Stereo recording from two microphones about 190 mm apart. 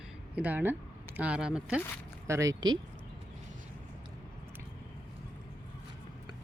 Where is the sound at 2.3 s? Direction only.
15° right (ahead or behind).